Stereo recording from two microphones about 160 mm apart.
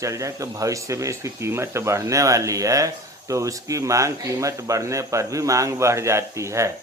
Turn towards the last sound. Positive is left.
turn(degrees=-20)  # may be behind; listen again after turning